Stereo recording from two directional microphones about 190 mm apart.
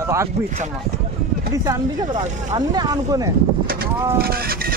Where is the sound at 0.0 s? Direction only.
15° right (ahead or behind).